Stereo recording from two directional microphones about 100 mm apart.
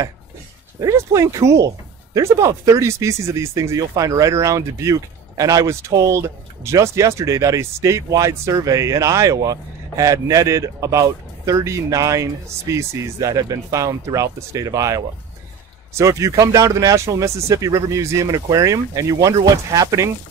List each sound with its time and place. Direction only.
0.7 s speech: 30° right (ahead or behind)